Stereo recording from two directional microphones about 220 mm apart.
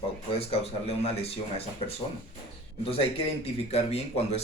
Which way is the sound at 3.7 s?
30° left (ahead or behind).